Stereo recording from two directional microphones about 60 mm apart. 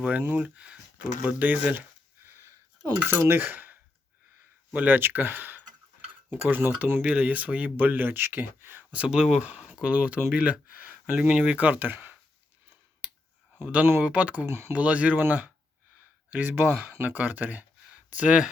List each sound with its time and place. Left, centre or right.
0.0 s speech: right
2.2 s a sound: right
3.1 s cutlery: right
4.7 s speech: right
8.9 s speech: centre
11.2 s speech: centre
11.5 s speech: right
14.0 s speech: right
14.4 s speech: right
14.7 s speech: right